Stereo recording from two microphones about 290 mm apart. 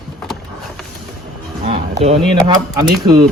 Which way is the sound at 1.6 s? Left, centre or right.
Right.